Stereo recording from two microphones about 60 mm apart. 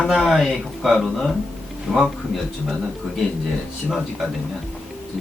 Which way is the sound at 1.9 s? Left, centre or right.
Centre.